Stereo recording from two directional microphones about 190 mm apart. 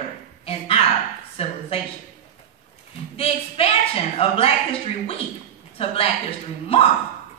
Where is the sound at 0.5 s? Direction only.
30° left (ahead or behind).